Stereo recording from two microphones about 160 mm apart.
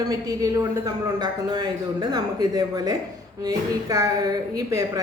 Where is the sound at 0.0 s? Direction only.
25° right (ahead or behind).